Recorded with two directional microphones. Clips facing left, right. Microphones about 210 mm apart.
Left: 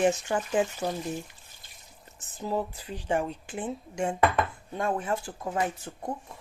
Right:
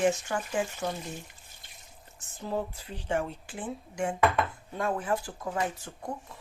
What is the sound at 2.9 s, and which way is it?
Speech, 15° left (ahead or behind).